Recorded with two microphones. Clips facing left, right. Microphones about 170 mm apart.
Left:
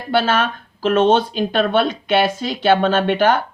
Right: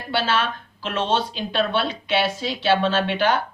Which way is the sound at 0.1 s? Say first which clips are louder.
Left 5 dB; 50° left (ahead or behind).